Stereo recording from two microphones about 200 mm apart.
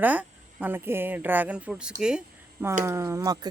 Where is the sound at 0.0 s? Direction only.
10° right (ahead or behind).